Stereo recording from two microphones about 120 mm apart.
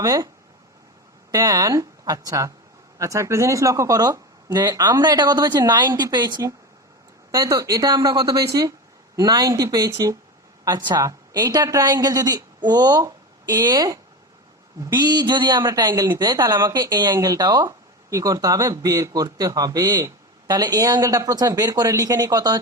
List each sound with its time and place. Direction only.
0.0 s speech: 30° right (ahead or behind)
1.3 s a woman's voice: 30° right (ahead or behind)